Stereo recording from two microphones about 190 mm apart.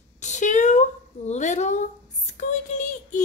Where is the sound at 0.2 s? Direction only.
40° left (ahead or behind).